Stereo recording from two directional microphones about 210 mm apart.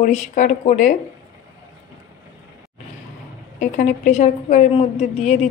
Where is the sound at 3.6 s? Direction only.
35° left (ahead or behind).